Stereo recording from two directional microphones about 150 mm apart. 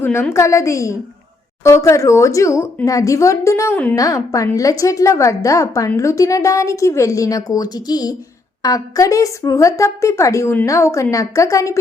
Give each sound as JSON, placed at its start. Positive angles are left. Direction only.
{"t": 0.0, "sound": "a woman's voice", "side_deg": 15}